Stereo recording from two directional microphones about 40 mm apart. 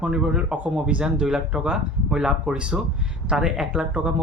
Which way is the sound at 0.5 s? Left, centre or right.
Right.